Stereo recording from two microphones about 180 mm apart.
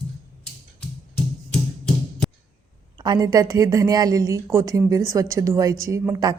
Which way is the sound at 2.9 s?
20° right (ahead or behind).